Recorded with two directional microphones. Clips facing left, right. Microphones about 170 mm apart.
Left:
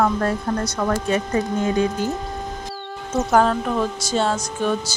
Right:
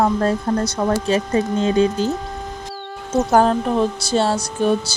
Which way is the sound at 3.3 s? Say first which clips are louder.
Right 2 dB; 35° right (ahead or behind).